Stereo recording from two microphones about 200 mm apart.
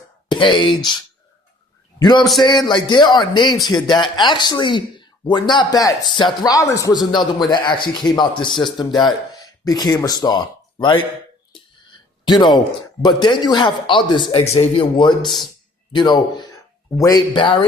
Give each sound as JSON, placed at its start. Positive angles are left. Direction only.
{"t": 0.3, "sound": "speech", "side_deg": 25}
{"t": 2.0, "sound": "a man's voice", "side_deg": 20}
{"t": 12.2, "sound": "speech", "side_deg": 20}